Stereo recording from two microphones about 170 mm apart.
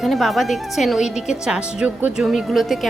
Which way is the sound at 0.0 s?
Centre (ahead or behind).